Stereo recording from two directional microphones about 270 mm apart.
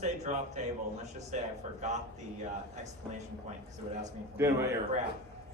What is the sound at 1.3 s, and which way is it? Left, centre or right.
Speech, right.